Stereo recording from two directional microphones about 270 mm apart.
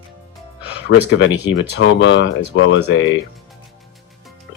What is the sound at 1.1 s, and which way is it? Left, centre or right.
Speech, left.